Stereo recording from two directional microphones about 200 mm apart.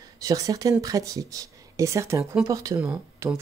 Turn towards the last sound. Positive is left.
turn(degrees=-15)  # may be behind; listen again after turning